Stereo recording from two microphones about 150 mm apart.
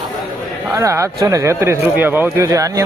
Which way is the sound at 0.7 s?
20° right (ahead or behind).